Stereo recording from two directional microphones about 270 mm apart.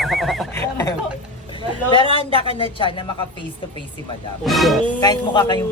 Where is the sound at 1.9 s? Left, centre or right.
Centre.